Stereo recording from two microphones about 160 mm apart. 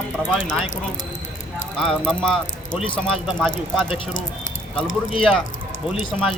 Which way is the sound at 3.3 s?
Centre (ahead or behind).